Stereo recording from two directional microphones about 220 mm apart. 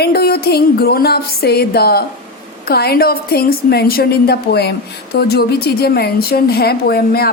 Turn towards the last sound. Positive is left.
turn(degrees=45)  # may be behind; listen again after turning